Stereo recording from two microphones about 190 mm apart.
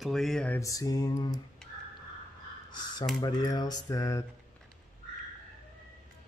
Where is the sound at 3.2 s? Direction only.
20° left (ahead or behind).